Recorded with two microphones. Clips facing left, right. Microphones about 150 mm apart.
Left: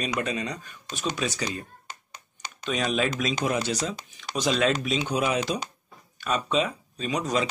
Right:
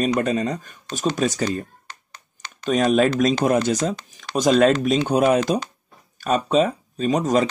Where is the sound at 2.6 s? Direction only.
45° right (ahead or behind).